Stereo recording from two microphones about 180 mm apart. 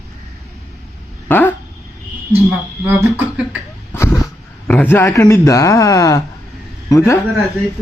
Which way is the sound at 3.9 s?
15° left (ahead or behind).